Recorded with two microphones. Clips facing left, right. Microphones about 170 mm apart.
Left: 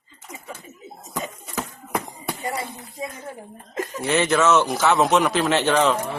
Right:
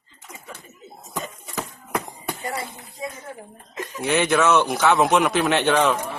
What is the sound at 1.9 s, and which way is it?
Basketball bounce, centre (ahead or behind).